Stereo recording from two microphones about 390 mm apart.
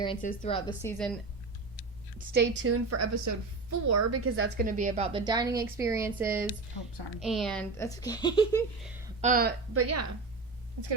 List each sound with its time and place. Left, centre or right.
0.0 s speech: centre
2.1 s a woman's voice: right; by 8.6 s centre
9.2 s a woman's voice: right
9.7 s a woman's voice: right